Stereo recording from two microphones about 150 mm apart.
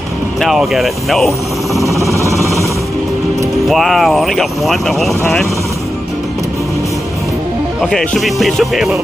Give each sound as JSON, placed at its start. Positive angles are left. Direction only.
{"t": 0.4, "sound": "speech", "side_deg": 0}
{"t": 1.8, "sound": "a sound", "side_deg": -20}
{"t": 2.1, "sound": "vehicle", "side_deg": -20}
{"t": 3.6, "sound": "speech", "side_deg": 0}
{"t": 7.8, "sound": "speech", "side_deg": 0}